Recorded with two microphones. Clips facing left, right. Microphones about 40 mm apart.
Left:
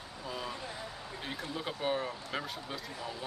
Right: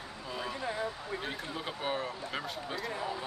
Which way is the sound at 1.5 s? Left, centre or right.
Centre.